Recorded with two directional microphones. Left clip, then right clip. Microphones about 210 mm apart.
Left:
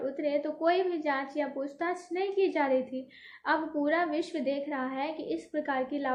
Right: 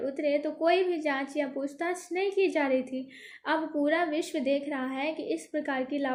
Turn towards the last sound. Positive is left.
turn(degrees=-45)  # may be behind; listen again after turning